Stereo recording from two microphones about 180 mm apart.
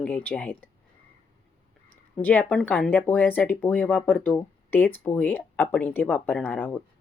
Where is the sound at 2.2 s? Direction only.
10° left (ahead or behind).